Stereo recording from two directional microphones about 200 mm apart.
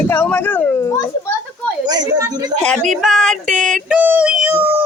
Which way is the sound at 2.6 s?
5° left (ahead or behind).